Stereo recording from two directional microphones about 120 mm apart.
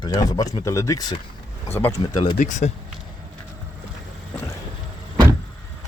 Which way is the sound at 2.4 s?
85° left.